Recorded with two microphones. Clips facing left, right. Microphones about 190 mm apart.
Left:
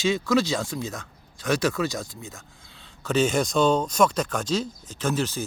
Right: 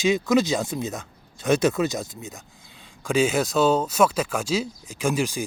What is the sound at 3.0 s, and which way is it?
Speech, 10° right (ahead or behind).